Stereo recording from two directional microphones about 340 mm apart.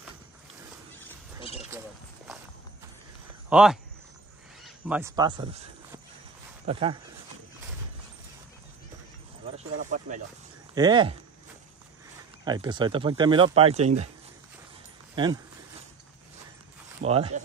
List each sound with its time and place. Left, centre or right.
1.4 s a sound: centre
3.4 s speech: centre
9.5 s speech: right
12.4 s speech: centre
17.0 s speech: centre